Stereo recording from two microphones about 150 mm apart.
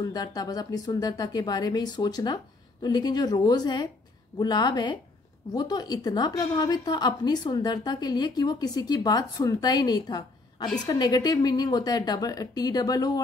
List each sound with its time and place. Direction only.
0.0 s a woman's voice: 25° left (ahead or behind)